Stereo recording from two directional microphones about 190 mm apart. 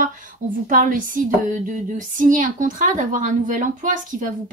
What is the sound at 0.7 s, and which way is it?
Speech, 45° right (ahead or behind).